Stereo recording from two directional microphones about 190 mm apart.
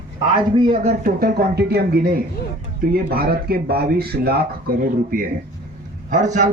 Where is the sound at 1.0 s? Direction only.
55° right (ahead or behind).